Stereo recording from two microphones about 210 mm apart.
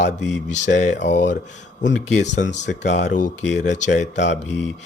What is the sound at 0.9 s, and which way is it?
Speech, 55° left (ahead or behind).